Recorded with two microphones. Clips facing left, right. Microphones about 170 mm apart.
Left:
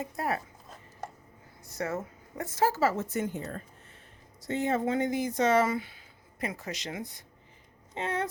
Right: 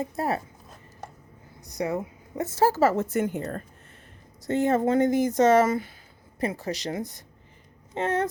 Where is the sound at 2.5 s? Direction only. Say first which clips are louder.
Right 5 dB; 35° right (ahead or behind).